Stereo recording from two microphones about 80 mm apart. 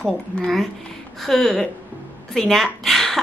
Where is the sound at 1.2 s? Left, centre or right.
Centre.